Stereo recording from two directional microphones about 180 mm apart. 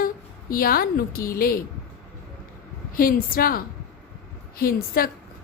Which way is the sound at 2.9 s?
50° left (ahead or behind).